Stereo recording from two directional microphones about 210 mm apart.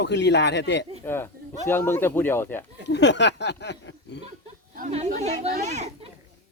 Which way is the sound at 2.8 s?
55° left (ahead or behind).